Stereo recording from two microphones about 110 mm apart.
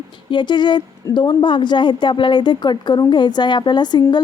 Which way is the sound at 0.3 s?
45° left (ahead or behind).